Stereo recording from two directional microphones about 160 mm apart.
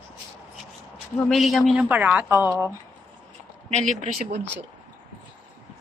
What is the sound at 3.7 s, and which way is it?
Speech, 45° right (ahead or behind).